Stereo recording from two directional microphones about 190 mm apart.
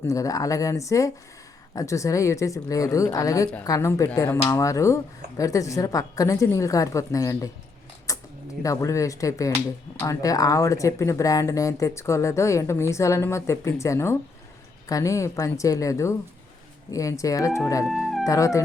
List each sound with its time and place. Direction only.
0.1 s speech: 15° left (ahead or behind)
8.1 s a sound: 15° left (ahead or behind)
8.6 s speech: 15° left (ahead or behind)
17.8 s music: centre (ahead or behind)
18.3 s speech: 15° left (ahead or behind)